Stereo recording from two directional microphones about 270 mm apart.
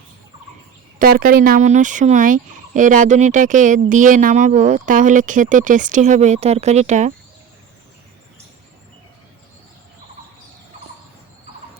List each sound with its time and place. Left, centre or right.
0.9 s speech: right